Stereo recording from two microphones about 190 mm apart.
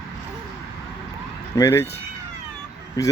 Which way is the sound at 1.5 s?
15° left (ahead or behind).